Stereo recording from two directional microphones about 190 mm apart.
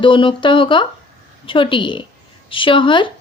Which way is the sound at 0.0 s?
25° left (ahead or behind).